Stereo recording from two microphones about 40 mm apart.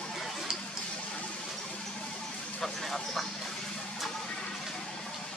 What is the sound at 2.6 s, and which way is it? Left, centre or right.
Speech, centre.